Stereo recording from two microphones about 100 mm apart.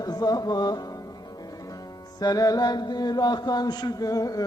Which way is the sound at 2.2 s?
40° left (ahead or behind).